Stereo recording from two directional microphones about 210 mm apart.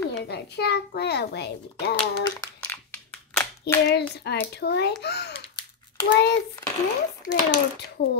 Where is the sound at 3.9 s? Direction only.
50° left (ahead or behind).